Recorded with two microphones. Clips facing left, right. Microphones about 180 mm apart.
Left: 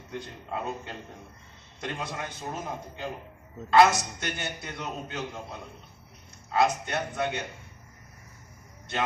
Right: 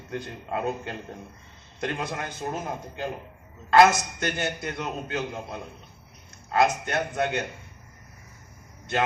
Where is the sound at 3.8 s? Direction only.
50° right (ahead or behind).